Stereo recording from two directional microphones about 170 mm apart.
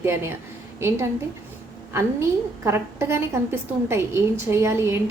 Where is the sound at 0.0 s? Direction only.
15° right (ahead or behind).